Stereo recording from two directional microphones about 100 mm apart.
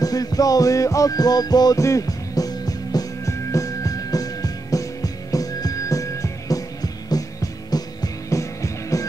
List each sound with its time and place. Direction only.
0.0 s music: 40° left (ahead or behind)